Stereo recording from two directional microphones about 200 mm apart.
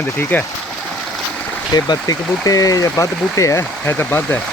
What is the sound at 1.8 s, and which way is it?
Speech, 20° left (ahead or behind).